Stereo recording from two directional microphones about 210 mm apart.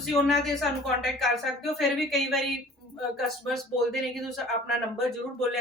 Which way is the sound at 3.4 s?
Centre (ahead or behind).